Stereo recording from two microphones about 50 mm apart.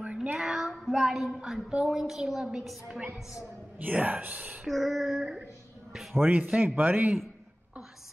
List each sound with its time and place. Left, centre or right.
0.0 s child singing: right
0.4 s child singing: centre
0.8 s female singing: centre
1.7 s a woman's voice: centre
3.8 s speech: right
4.6 s female singing: centre
6.2 s speech: right